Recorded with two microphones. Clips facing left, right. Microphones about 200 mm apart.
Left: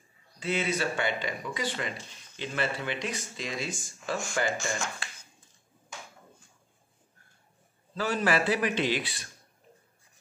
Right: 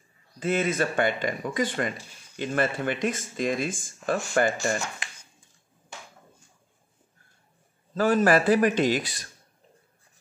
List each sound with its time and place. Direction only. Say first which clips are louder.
0.4 s speech: right 5 dB; 50° right (ahead or behind)
7.9 s speech: right 7 dB; 50° right (ahead or behind)